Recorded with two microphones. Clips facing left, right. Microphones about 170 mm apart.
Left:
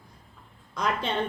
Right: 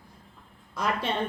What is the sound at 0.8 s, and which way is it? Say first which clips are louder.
Speech: left 1 dB; 5° right (ahead or behind).